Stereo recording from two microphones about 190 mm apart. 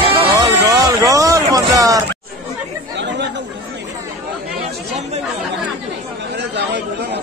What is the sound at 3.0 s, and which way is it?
Chatter, 65° right (ahead or behind).